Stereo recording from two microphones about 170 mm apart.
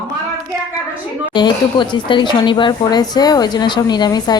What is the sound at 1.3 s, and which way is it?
Speech, 25° left (ahead or behind).